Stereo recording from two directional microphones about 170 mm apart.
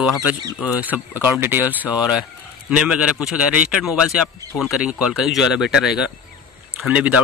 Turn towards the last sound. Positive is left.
turn(degrees=-5)  # may be behind; listen again after turning